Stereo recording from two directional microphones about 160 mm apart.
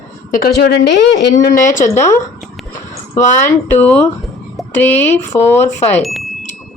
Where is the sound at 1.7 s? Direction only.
15° left (ahead or behind).